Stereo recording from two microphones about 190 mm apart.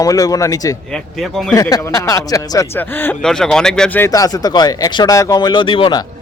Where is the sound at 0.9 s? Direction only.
5° left (ahead or behind).